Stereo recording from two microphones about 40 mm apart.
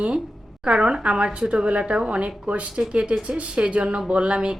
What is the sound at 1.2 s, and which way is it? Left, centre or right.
A woman's voice, right.